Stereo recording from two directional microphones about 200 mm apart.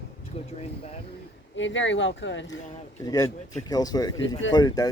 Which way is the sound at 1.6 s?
65° left (ahead or behind).